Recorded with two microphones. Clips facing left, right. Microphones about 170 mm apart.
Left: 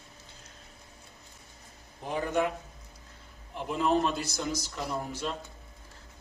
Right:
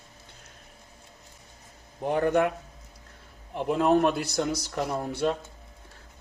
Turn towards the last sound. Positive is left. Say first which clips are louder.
# right 6 dB
turn(degrees=-60)  # may be behind; listen again after turning